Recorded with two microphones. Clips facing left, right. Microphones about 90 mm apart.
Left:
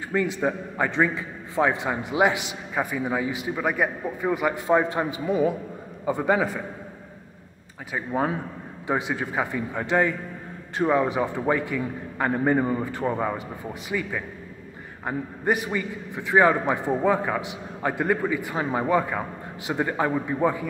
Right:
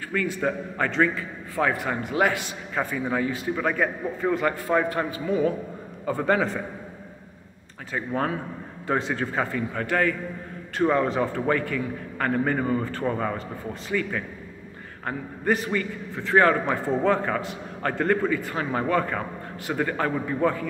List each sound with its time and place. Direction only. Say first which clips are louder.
0.1 s a man's voice: left 2 dB; 20° left (ahead or behind)
7.9 s a man's voice: left 1 dB; 10° left (ahead or behind)